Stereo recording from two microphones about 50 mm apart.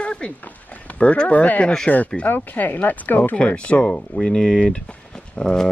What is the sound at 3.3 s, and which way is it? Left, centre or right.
Speech, left.